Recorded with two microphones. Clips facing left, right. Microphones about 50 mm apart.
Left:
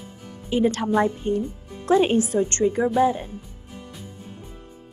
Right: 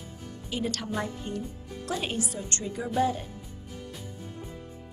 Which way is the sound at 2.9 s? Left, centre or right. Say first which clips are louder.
Left 3 dB; centre.